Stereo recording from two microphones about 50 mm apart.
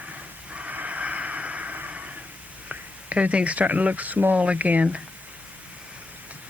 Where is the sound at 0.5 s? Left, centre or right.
Right.